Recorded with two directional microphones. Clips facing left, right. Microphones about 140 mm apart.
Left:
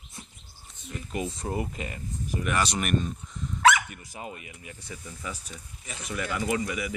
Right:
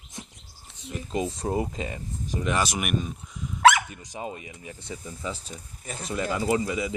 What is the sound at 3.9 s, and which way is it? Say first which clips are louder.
Speech: right 4 dB; 25° right (ahead or behind).